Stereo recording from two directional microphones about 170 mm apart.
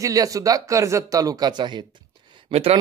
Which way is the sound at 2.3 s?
35° right (ahead or behind).